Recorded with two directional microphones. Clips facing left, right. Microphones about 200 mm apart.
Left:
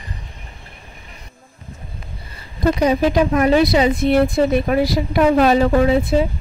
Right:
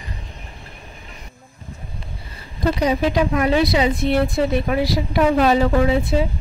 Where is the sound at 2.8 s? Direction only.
45° left (ahead or behind).